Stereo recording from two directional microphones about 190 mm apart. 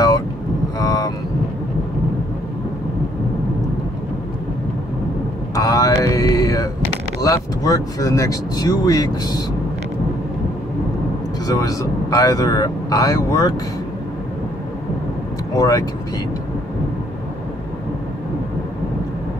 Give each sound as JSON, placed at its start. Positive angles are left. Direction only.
{"t": 0.7, "sound": "vehicle", "side_deg": 20}
{"t": 5.5, "sound": "vehicle", "side_deg": 20}
{"t": 6.1, "sound": "mantra", "side_deg": 20}
{"t": 7.2, "sound": "speech", "side_deg": 20}
{"t": 11.4, "sound": "speech", "side_deg": 20}
{"t": 15.5, "sound": "speech", "side_deg": 20}